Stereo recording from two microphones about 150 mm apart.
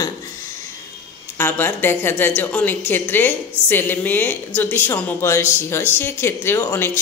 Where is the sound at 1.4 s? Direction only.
15° left (ahead or behind).